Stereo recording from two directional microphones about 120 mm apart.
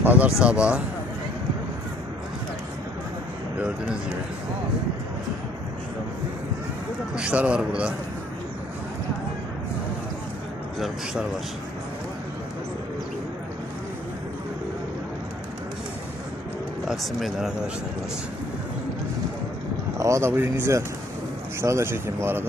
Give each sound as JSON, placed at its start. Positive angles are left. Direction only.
{"t": 0.0, "sound": "a sound", "side_deg": -15}
{"t": 0.4, "sound": "a man's voice", "side_deg": -10}
{"t": 7.2, "sound": "a man's voice", "side_deg": -10}
{"t": 10.8, "sound": "speech", "side_deg": 0}
{"t": 16.8, "sound": "speech", "side_deg": 0}
{"t": 20.0, "sound": "speech", "side_deg": -25}